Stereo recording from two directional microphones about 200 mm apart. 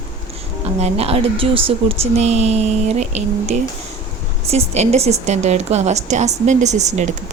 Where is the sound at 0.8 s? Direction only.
30° right (ahead or behind).